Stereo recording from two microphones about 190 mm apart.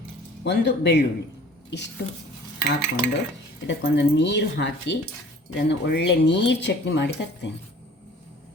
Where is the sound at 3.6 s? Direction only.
70° left (ahead or behind).